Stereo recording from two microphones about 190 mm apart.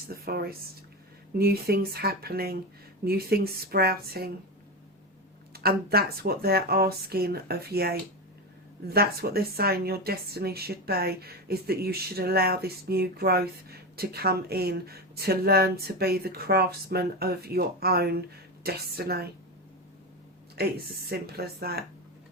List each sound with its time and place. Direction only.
0.1 s speech: 55° right (ahead or behind)
5.5 s speech: 55° right (ahead or behind)
20.6 s speech: 55° right (ahead or behind)